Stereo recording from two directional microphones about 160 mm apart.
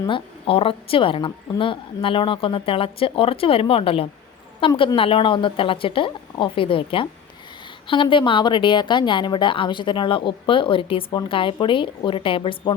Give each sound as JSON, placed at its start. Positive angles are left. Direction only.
{"t": 0.0, "sound": "a woman's voice", "side_deg": 35}